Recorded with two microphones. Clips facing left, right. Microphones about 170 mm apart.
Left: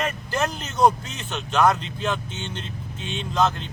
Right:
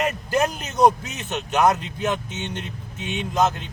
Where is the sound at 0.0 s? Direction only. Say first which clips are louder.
Right 4 dB; 15° right (ahead or behind).